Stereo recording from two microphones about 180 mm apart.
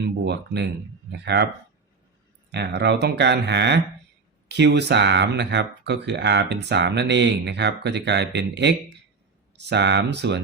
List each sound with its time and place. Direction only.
0.0 s speech: 70° right (ahead or behind)
2.5 s speech: 70° right (ahead or behind)